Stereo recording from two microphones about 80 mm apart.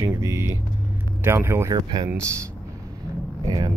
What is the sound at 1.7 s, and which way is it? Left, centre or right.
Speech, right.